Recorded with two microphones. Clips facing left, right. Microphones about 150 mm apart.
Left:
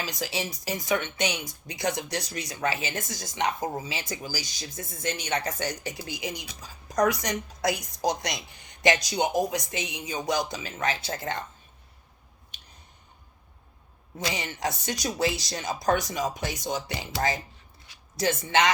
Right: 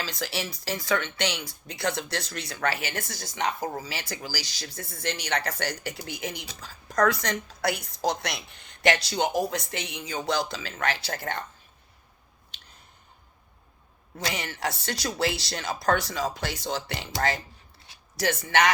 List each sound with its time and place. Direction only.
0.0 s speech: 15° left (ahead or behind)
14.3 s speech: 20° left (ahead or behind)